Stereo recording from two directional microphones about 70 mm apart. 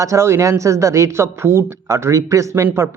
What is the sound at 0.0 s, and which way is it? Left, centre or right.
Speech, right.